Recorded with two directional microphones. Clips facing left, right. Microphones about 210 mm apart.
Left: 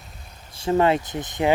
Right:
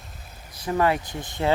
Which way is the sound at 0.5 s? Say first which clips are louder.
Left 4 dB; 25° left (ahead or behind).